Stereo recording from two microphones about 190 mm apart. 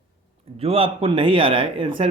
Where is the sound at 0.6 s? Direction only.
30° right (ahead or behind).